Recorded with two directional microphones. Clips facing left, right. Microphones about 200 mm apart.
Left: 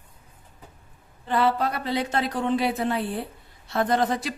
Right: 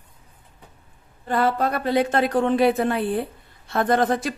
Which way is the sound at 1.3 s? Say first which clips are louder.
Right 2 dB; 45° right (ahead or behind).